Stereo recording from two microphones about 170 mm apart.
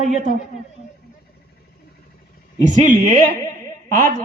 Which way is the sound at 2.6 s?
45° right (ahead or behind).